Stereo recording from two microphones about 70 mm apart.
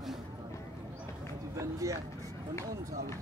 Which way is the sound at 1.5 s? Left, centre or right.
Right.